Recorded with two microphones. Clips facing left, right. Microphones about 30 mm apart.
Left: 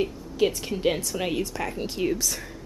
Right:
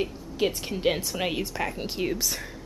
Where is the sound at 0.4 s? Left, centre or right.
Centre.